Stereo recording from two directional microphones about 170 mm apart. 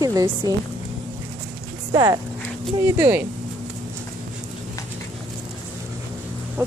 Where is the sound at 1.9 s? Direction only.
20° right (ahead or behind).